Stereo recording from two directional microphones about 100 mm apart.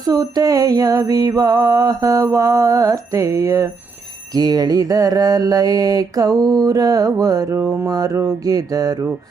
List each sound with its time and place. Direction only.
0.0 s mantra: 40° right (ahead or behind)